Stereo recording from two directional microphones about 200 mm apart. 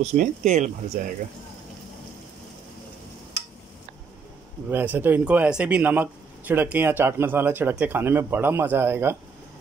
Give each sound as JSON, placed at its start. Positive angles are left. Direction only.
{"t": 0.0, "sound": "speech", "side_deg": -40}
{"t": 4.6, "sound": "speech", "side_deg": -10}